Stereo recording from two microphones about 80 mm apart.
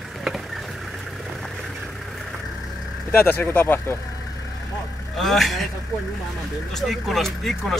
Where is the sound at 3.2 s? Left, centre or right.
Left.